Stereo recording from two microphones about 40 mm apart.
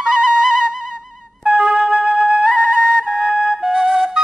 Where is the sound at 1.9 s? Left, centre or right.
Right.